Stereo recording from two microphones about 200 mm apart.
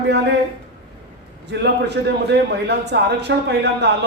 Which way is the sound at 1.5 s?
55° right (ahead or behind).